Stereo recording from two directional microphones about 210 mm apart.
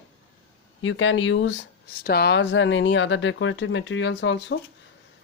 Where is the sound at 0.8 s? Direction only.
65° left (ahead or behind).